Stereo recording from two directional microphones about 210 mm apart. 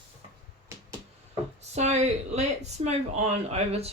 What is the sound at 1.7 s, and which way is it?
Speech, 30° right (ahead or behind).